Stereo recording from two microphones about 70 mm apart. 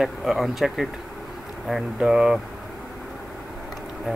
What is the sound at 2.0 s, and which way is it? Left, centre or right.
Speech, centre.